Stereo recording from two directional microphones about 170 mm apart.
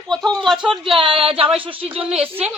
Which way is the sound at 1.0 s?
30° right (ahead or behind).